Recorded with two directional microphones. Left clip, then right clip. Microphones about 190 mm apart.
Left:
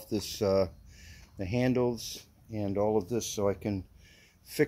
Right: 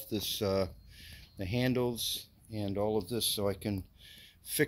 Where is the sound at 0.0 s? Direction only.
5° left (ahead or behind).